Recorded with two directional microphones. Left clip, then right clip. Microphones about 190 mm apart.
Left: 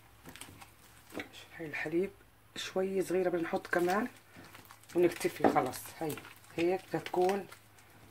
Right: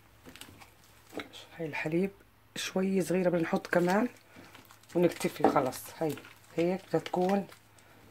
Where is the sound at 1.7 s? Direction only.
45° right (ahead or behind).